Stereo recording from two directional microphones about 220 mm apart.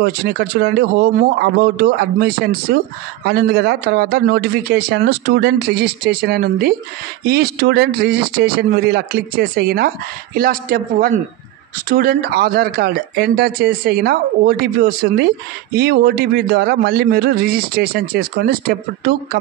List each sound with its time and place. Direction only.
0.0 s speech: 45° right (ahead or behind)